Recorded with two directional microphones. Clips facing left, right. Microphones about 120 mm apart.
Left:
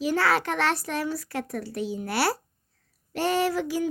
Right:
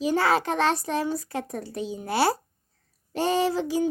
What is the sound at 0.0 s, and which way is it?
A child's voice, 20° right (ahead or behind).